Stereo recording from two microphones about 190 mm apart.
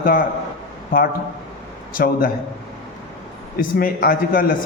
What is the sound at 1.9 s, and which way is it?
Speech, 45° left (ahead or behind).